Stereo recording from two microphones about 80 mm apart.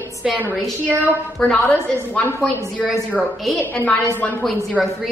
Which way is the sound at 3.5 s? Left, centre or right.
Left.